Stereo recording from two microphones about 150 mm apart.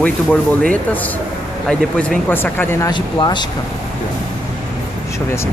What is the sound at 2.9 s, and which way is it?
Speech, 30° left (ahead or behind).